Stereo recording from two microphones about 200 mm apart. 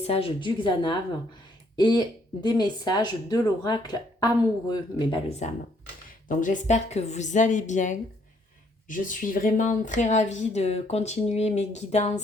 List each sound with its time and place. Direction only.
0.0 s speech: 30° left (ahead or behind)
6.2 s speech: 40° left (ahead or behind)